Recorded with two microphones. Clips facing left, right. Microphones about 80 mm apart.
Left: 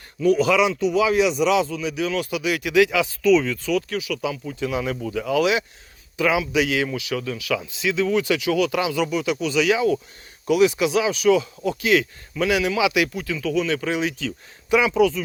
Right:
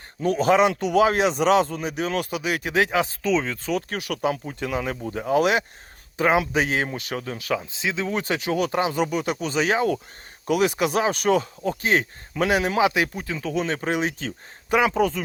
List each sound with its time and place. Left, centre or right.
0.2 s speech: right
0.7 s speech: right
3.9 s speech: right